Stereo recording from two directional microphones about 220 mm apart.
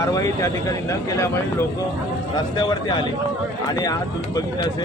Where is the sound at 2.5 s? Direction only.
20° left (ahead or behind).